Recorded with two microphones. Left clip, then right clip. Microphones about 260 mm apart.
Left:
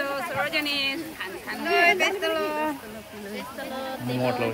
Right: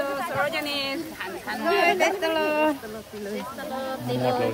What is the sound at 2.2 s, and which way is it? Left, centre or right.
Speech, right.